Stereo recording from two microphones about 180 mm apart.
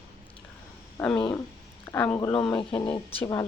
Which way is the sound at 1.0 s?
15° left (ahead or behind).